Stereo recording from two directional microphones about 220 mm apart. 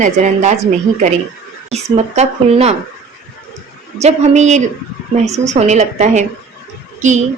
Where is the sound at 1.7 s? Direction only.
30° right (ahead or behind).